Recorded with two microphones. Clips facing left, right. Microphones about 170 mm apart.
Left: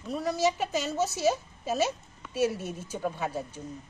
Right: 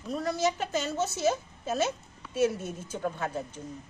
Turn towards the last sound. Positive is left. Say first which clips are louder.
# left 1 dB
turn(degrees=5)  # may be behind; listen again after turning